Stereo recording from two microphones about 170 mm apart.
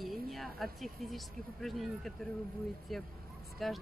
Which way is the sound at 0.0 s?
Centre (ahead or behind).